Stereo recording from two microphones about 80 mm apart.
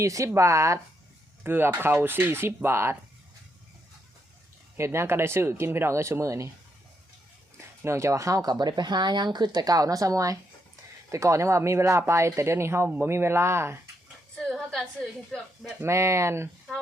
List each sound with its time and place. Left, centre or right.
0.0 s speech: right
1.5 s speech: right
4.8 s speech: right
7.9 s speech: right
8.5 s speech: right
14.5 s a sound: centre
15.3 s speech: centre
15.8 s speech: right